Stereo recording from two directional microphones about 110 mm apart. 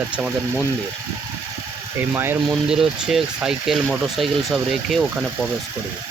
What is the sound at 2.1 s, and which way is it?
Speech, 20° right (ahead or behind).